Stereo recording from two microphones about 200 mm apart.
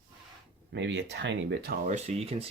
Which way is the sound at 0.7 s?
65° right (ahead or behind).